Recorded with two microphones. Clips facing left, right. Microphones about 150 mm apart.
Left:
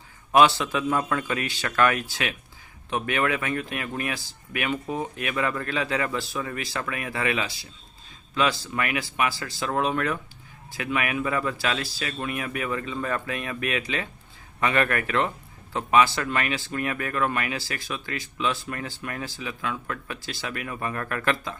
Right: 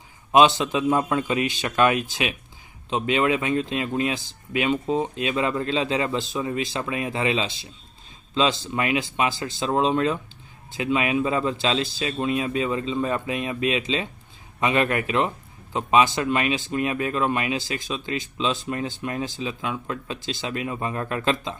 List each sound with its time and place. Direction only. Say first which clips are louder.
0.3 s speech: right 2 dB; 20° right (ahead or behind)